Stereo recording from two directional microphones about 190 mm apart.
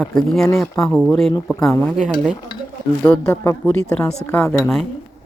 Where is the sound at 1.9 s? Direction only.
Centre (ahead or behind).